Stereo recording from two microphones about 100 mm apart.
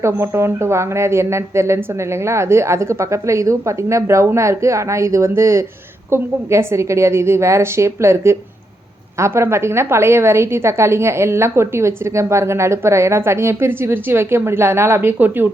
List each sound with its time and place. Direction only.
0.0 s a woman's voice: 25° right (ahead or behind)